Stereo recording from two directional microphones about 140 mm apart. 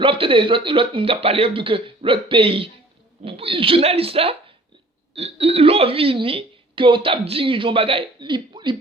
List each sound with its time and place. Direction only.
0.0 s a woman's voice: 40° right (ahead or behind)